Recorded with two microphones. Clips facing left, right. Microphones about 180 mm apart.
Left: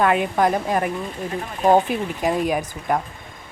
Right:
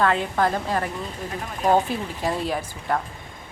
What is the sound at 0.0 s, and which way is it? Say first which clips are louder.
A woman's voice: left 3 dB; 15° left (ahead or behind).